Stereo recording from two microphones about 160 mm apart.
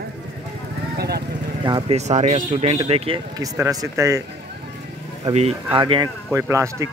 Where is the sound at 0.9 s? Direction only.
85° right.